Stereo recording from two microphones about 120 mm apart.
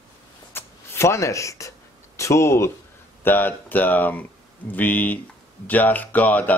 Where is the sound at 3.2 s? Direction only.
15° left (ahead or behind).